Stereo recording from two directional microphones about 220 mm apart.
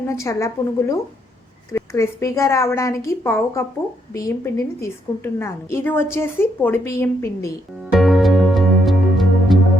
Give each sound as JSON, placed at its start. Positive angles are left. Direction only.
{"t": 0.1, "sound": "a woman's voice", "side_deg": 15}
{"t": 7.9, "sound": "music", "side_deg": 0}